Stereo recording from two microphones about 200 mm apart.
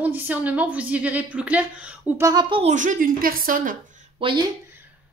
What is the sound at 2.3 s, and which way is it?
Speech, 20° right (ahead or behind).